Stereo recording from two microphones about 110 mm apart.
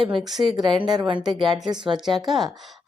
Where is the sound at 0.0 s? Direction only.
50° right (ahead or behind).